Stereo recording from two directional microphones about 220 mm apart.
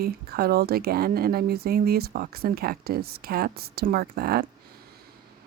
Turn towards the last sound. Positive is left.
turn(degrees=-45)  # may be behind; listen again after turning